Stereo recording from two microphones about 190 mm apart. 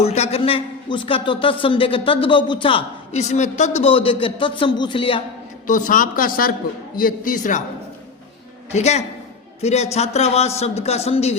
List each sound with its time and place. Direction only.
0.0 s a man's voice: 35° left (ahead or behind)
5.6 s speech: 45° left (ahead or behind)
8.7 s speech: 35° left (ahead or behind)